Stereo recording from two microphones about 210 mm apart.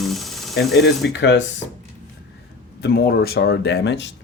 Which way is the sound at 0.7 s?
55° left (ahead or behind).